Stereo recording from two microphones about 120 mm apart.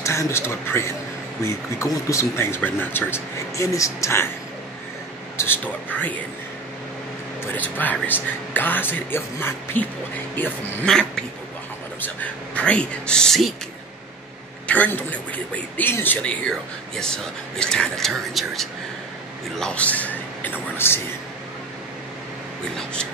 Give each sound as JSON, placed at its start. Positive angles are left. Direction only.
{"t": 0.0, "sound": "speech", "side_deg": 25}
{"t": 5.4, "sound": "speech", "side_deg": 15}
{"t": 7.5, "sound": "speech", "side_deg": 15}
{"t": 12.2, "sound": "speech", "side_deg": 10}
{"t": 14.7, "sound": "speech", "side_deg": 15}
{"t": 19.6, "sound": "a man's voice", "side_deg": 10}